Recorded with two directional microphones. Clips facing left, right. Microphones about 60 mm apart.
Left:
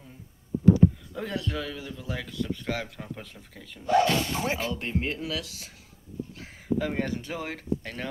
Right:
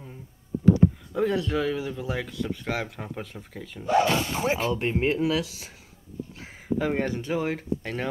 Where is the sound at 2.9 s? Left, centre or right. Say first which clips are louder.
Right 4 dB; right.